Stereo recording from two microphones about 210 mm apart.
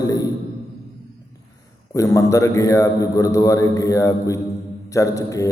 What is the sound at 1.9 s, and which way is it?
A man's voice, 15° left (ahead or behind).